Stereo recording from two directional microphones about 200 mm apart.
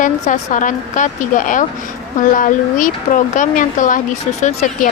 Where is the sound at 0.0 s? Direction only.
40° left (ahead or behind).